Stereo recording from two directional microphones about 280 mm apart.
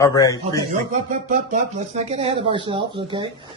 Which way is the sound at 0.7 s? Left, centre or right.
Right.